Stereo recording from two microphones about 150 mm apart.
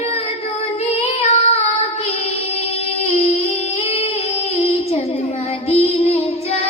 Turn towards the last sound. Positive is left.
turn(degrees=45)  # may be behind; listen again after turning